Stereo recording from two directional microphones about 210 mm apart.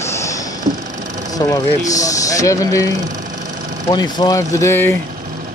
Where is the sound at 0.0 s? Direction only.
15° left (ahead or behind).